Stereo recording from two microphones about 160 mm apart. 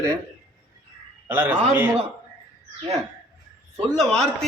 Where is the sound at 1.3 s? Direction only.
10° right (ahead or behind).